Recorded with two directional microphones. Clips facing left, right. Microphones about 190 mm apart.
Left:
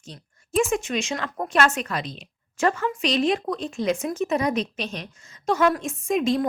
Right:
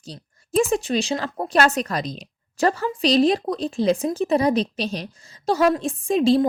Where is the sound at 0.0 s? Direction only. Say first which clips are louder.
Right 4 dB; 35° right (ahead or behind).